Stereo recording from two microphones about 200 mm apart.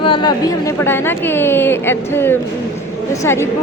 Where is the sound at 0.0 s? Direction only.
25° left (ahead or behind).